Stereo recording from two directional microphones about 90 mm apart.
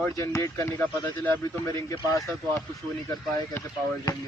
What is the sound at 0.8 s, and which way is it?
Speech, 20° left (ahead or behind).